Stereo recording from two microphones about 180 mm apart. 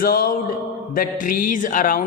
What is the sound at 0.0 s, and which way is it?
A man's voice, 55° left (ahead or behind).